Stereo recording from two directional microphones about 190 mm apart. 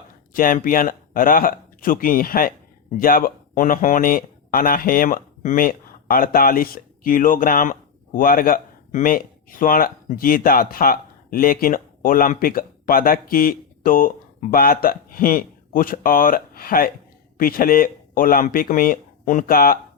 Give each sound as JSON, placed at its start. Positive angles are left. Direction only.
{"t": 0.3, "sound": "speech", "side_deg": 45}